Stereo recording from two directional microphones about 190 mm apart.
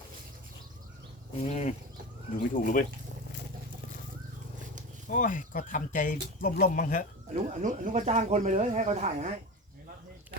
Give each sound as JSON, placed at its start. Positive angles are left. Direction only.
{"t": 1.5, "sound": "a sound", "side_deg": 35}
{"t": 2.6, "sound": "speech", "side_deg": 50}
{"t": 5.0, "sound": "speech", "side_deg": 45}
{"t": 7.3, "sound": "speech", "side_deg": -45}